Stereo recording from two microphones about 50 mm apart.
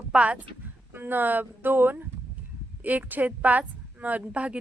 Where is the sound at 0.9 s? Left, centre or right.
Right.